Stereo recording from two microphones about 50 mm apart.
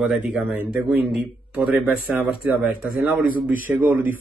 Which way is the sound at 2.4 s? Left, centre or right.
Right.